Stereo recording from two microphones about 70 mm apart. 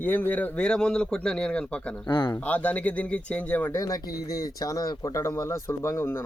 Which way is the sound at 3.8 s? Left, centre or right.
Left.